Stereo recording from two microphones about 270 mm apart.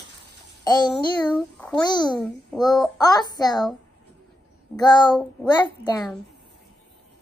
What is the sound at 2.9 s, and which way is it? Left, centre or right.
Speech, centre.